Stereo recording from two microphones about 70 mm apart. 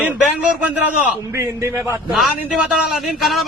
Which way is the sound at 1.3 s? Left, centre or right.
Right.